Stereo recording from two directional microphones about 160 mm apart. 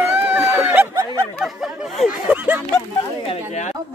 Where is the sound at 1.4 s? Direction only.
Centre (ahead or behind).